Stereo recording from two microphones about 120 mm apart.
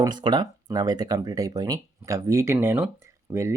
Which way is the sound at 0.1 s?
40° right (ahead or behind).